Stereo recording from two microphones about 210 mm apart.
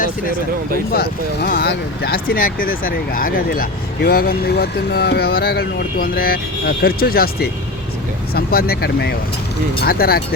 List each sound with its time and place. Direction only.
0.9 s speech: 45° left (ahead or behind)